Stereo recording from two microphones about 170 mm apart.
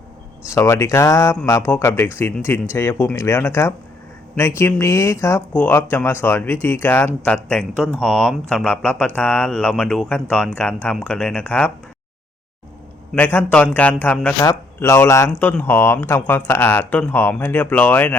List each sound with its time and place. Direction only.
0.4 s speech: 15° left (ahead or behind)
13.1 s speech: 10° left (ahead or behind)